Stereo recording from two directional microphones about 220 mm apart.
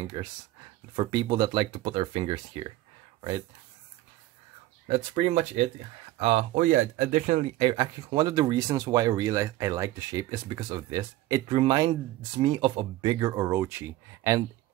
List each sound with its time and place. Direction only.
0.0 s speech: 20° right (ahead or behind)
4.8 s speech: 30° right (ahead or behind)
6.5 s speech: 40° right (ahead or behind)
7.5 s speech: 20° right (ahead or behind)